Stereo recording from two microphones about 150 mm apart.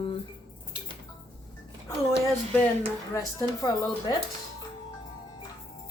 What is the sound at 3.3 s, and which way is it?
Speech, 25° left (ahead or behind).